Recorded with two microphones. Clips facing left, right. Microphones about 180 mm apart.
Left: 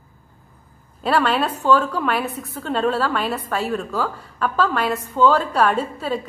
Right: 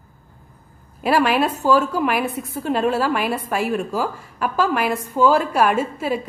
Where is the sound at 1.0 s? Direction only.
10° right (ahead or behind).